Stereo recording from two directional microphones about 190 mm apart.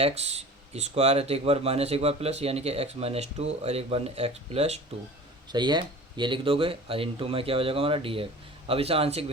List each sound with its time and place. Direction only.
0.0 s speech: 35° right (ahead or behind)
5.5 s speech: 25° right (ahead or behind)